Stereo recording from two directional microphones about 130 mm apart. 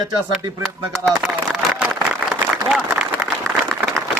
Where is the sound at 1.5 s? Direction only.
5° right (ahead or behind).